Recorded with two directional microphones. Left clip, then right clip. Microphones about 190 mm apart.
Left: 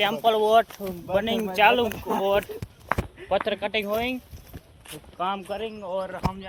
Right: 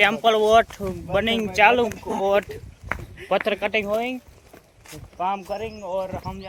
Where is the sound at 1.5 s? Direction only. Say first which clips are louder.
Right 2 dB; 20° right (ahead or behind).